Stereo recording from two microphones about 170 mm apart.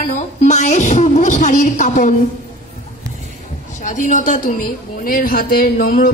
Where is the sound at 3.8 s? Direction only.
50° left (ahead or behind).